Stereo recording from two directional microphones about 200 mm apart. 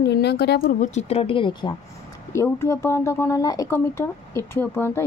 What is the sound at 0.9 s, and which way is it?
Speech, 30° left (ahead or behind).